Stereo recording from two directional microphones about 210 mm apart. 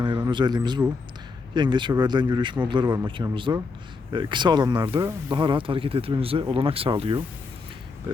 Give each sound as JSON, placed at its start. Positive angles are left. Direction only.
{"t": 0.3, "sound": "speech", "side_deg": -20}